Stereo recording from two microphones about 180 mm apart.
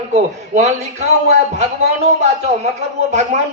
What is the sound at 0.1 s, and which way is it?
A man's voice, 40° right (ahead or behind).